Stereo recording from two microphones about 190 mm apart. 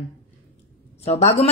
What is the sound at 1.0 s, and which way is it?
Speech, 35° left (ahead or behind).